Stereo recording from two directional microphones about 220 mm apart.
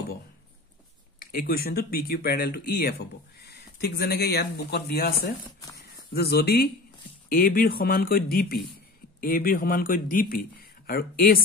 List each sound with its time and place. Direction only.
1.2 s a man's voice: 45° left (ahead or behind)